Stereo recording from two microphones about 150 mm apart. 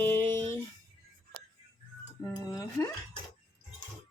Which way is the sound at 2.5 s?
20° left (ahead or behind).